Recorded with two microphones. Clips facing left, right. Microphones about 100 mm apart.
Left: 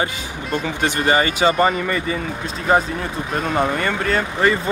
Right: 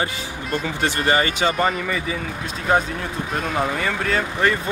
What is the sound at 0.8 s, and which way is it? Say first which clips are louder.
Speech: left 2 dB; 20° left (ahead or behind).